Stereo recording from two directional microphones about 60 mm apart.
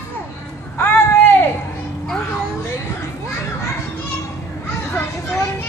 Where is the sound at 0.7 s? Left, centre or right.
Left.